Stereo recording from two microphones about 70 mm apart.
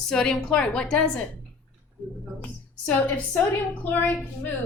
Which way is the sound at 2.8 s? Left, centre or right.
Centre.